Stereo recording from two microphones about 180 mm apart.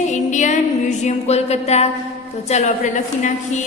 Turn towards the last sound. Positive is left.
turn(degrees=40)  # may be behind; listen again after turning